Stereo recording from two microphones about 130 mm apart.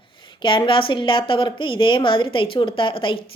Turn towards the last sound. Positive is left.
turn(degrees=40)  # may be behind; listen again after turning